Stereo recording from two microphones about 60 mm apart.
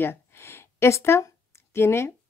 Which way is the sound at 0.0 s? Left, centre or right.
Left.